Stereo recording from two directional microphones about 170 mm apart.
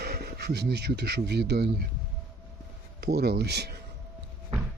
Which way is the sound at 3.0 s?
70° right (ahead or behind).